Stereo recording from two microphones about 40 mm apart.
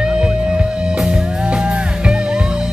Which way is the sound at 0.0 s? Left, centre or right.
Centre.